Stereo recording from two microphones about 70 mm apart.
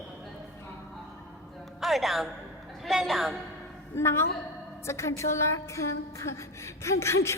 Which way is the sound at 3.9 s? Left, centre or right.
Left.